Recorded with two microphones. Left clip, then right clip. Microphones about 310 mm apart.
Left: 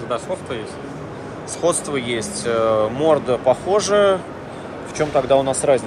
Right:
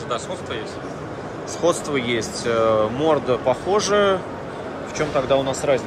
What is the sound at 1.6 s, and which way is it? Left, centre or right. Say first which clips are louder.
Speech: even; centre.